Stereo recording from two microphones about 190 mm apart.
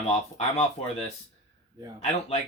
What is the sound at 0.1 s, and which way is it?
Speech, 35° left (ahead or behind).